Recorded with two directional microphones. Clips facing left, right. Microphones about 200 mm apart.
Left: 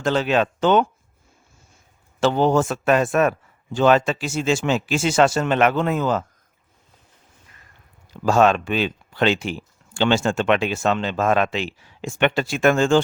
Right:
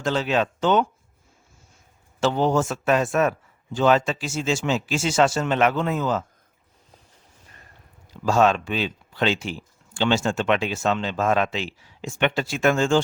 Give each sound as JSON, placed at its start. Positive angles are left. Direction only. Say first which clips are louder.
{"t": 0.0, "sound": "speech", "louder": "left 3 dB", "side_deg": 65}
{"t": 2.2, "sound": "speech", "louder": "left 3 dB", "side_deg": 65}
{"t": 8.2, "sound": "speech", "louder": "left 2 dB", "side_deg": 60}